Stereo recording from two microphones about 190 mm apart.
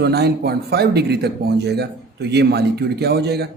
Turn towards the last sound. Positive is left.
turn(degrees=-60)  # may be behind; listen again after turning